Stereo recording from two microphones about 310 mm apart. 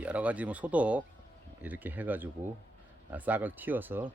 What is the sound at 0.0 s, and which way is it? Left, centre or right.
Speech, centre.